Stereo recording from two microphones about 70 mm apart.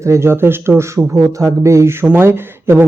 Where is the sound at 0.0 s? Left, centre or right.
Right.